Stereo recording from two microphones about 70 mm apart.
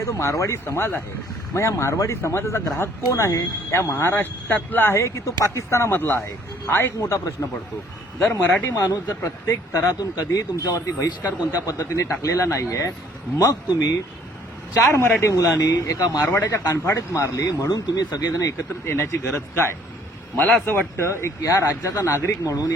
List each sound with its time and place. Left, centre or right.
0.0 s speech: left
1.5 s speech: left
4.9 s speech: left
5.9 s speech: left
8.7 s speech: left
10.0 s speech: left
13.4 s speech: left
15.5 s speech: left
16.2 s speech: left
16.6 s speech: left
17.7 s speech: left
18.9 s a man's voice: left
20.9 s speech: left